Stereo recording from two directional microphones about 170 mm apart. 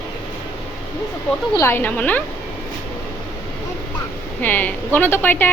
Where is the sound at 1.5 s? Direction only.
15° left (ahead or behind).